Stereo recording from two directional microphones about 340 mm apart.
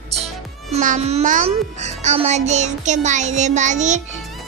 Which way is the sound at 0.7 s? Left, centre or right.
Centre.